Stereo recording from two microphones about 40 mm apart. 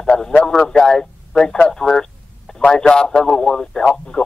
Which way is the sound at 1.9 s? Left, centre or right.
Centre.